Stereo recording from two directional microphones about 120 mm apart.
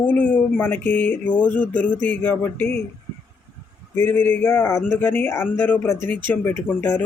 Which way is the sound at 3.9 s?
15° left (ahead or behind).